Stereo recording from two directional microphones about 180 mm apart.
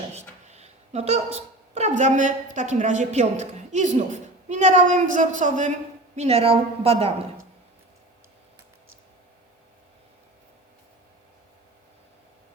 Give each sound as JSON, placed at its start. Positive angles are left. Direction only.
{"t": 0.1, "sound": "a woman's voice", "side_deg": -35}